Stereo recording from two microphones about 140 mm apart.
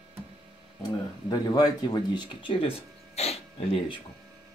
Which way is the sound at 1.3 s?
30° left (ahead or behind).